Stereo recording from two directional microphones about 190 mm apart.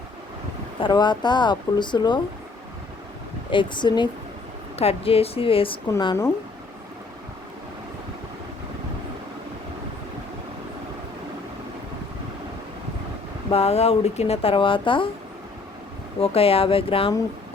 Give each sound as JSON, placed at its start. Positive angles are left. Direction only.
{"t": 0.8, "sound": "speech", "side_deg": 25}
{"t": 3.5, "sound": "speech", "side_deg": 25}
{"t": 13.5, "sound": "speech", "side_deg": 35}
{"t": 16.2, "sound": "speech", "side_deg": 30}